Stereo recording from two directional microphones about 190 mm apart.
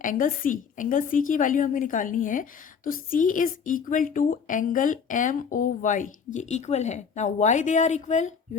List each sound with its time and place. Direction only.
0.0 s a woman's voice: 45° left (ahead or behind)